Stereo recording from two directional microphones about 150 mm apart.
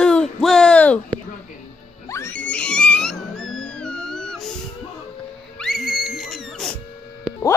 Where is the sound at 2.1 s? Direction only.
20° left (ahead or behind).